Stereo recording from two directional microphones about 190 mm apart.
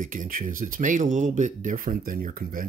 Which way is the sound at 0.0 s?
45° right (ahead or behind).